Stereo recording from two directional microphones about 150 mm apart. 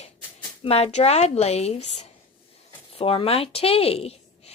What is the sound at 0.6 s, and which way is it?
A woman's voice, 45° left (ahead or behind).